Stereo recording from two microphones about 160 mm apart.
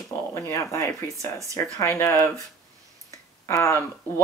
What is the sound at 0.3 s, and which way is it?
Speech, 20° left (ahead or behind).